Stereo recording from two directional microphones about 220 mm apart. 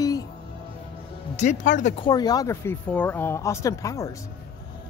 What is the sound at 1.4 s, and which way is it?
Speech, 35° left (ahead or behind).